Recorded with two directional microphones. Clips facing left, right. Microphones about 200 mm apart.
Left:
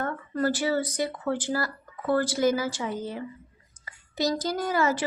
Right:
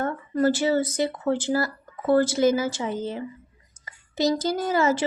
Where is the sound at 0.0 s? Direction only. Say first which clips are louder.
Right 5 dB; 25° right (ahead or behind).